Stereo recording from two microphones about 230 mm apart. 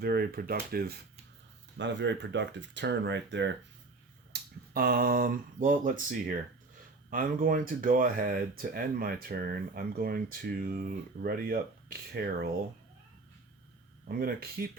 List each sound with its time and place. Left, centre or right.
0.0 s speech: right
14.1 s speech: right